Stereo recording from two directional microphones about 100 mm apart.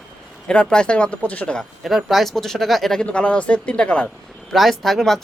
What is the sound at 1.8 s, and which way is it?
Speech, centre (ahead or behind).